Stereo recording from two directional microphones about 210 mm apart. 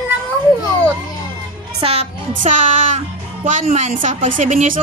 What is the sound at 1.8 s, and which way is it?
Speech, 30° right (ahead or behind).